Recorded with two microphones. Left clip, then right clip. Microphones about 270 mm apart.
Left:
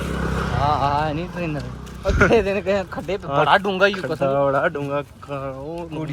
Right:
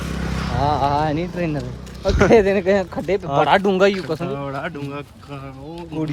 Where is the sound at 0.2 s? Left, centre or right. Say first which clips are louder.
Left 4 dB; left.